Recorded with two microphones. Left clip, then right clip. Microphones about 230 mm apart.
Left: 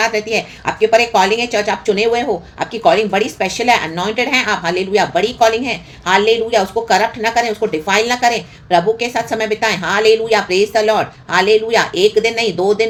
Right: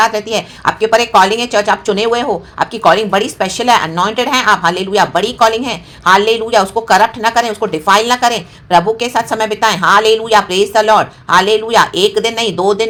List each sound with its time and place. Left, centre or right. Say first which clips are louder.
0.0 s speech: right 3 dB; right